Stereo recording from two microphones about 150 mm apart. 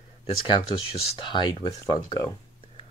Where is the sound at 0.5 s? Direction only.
40° left (ahead or behind).